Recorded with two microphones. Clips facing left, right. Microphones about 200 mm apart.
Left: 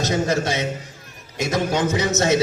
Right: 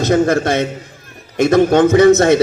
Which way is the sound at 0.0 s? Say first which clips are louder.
Right 8 dB; 55° right (ahead or behind).